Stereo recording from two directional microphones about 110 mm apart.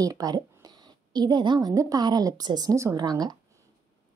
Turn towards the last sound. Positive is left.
turn(degrees=-35)  # may be behind; listen again after turning